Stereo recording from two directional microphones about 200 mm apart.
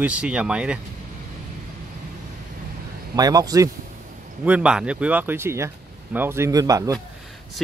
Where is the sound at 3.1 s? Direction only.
20° right (ahead or behind).